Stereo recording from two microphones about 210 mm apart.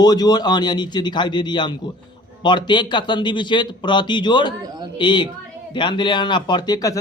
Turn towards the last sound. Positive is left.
turn(degrees=20)  # may be behind; listen again after turning